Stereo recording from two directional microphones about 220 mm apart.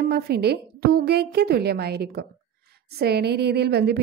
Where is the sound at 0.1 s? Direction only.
45° right (ahead or behind).